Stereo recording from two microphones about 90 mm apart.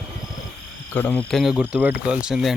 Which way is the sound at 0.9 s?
20° left (ahead or behind).